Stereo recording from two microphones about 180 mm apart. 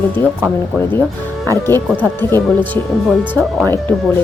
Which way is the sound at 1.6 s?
15° left (ahead or behind).